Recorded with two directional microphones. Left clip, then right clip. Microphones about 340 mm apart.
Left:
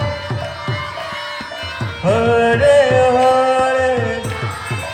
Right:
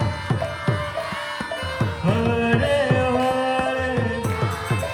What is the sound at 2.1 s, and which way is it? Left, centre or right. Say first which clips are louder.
Music: left 9 dB; centre.